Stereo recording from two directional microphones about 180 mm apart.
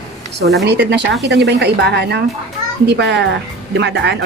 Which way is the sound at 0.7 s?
70° right (ahead or behind).